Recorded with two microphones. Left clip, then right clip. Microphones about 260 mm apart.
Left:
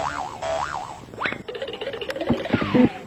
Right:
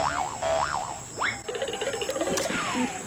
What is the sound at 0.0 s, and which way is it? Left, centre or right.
Boing, centre.